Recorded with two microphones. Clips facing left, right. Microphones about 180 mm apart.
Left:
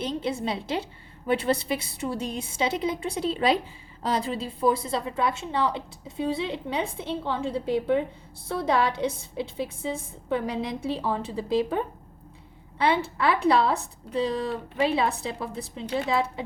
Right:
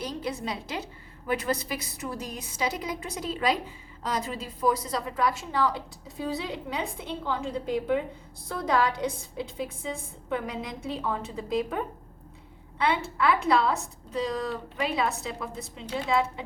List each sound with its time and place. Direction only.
0.0 s a woman's voice: 25° left (ahead or behind)